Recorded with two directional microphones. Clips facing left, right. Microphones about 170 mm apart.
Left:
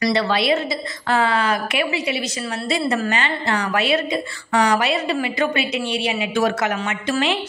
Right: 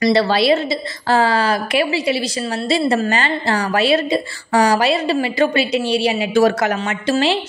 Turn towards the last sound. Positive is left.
turn(degrees=-30)  # may be behind; listen again after turning